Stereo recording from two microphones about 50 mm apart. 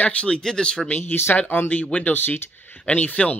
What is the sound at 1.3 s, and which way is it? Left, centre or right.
Speech, left.